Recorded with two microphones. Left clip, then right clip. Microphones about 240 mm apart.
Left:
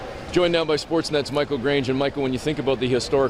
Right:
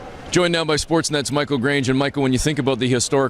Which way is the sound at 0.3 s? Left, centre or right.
Right.